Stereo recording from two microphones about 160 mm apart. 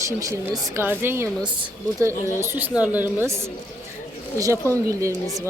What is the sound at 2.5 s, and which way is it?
Speech, 10° right (ahead or behind).